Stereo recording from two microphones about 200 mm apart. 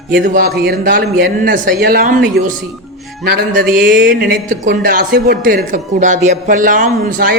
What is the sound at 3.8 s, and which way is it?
Speech, 50° right (ahead or behind).